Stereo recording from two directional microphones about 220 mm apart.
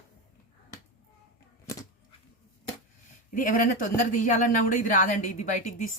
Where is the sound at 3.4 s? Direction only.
40° left (ahead or behind).